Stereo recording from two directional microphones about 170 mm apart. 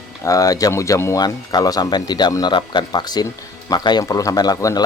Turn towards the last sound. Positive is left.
turn(degrees=20)  # may be behind; listen again after turning